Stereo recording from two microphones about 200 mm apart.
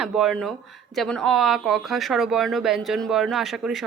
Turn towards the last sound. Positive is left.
turn(degrees=0)  # may be behind; listen again after turning